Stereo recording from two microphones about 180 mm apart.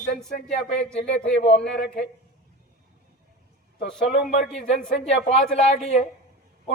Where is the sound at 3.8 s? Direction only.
Centre (ahead or behind).